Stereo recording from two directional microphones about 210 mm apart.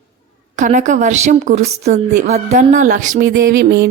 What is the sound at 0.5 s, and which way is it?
A woman's voice, 35° right (ahead or behind).